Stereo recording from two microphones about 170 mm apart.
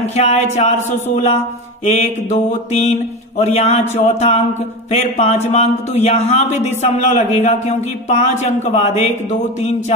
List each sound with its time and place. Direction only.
0.0 s speech: 40° left (ahead or behind)